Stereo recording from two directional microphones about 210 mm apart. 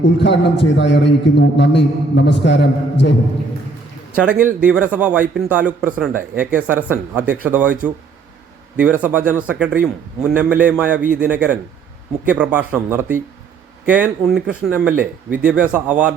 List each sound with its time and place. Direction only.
0.0 s a man's voice: 55° left (ahead or behind)
4.1 s speech: 5° right (ahead or behind)